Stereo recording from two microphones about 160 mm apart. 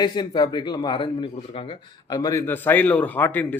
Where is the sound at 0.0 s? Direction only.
25° left (ahead or behind).